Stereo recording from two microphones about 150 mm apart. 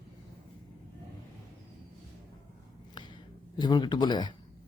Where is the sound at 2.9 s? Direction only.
30° left (ahead or behind).